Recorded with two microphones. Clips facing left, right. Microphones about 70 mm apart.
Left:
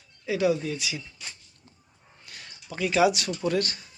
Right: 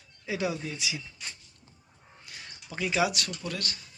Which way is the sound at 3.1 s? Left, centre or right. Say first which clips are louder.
Left 8 dB; centre.